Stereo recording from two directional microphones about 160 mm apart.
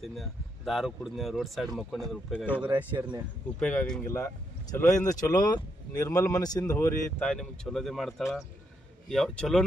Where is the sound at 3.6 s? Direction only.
10° left (ahead or behind).